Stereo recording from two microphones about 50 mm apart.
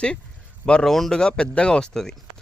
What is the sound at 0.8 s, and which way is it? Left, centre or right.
Speech, centre.